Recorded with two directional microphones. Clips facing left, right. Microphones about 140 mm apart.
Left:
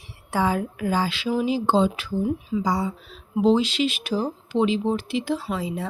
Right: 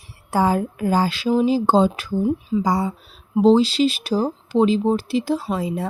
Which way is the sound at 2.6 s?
50° right (ahead or behind).